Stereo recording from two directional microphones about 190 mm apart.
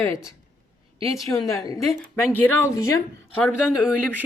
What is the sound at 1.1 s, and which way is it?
A woman's voice, 15° left (ahead or behind).